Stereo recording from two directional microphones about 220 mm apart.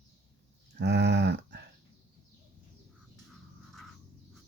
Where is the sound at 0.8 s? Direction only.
50° right (ahead or behind).